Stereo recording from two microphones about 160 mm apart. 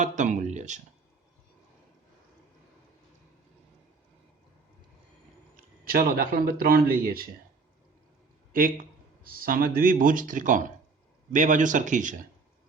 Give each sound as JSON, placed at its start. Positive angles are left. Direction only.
{"t": 0.0, "sound": "speech", "side_deg": -50}
{"t": 5.5, "sound": "a man's voice", "side_deg": -65}
{"t": 8.5, "sound": "speech", "side_deg": -60}